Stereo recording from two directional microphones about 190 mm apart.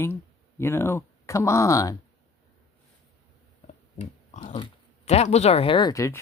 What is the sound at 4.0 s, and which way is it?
Speech, 35° left (ahead or behind).